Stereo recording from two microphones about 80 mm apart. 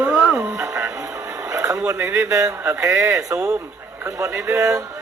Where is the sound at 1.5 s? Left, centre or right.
Right.